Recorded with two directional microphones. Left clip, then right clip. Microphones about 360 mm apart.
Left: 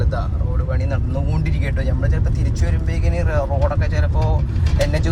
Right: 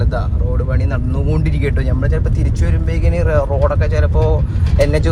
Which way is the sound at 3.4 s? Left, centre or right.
Right.